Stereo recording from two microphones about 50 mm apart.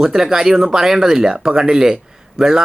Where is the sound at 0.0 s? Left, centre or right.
Centre.